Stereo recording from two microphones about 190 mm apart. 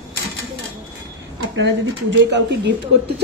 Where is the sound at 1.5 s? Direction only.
70° right (ahead or behind).